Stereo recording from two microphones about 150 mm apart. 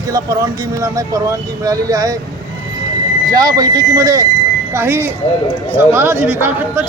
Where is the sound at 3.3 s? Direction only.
25° right (ahead or behind).